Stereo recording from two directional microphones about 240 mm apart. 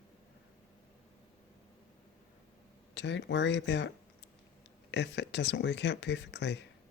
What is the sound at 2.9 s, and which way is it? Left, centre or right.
Speech, left.